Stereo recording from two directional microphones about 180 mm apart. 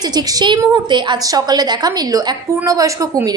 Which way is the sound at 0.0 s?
20° right (ahead or behind).